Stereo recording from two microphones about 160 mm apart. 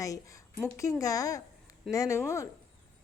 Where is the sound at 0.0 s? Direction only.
20° left (ahead or behind).